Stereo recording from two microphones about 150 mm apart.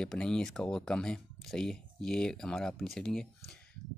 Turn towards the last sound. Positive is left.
turn(degrees=5)  # may be behind; listen again after turning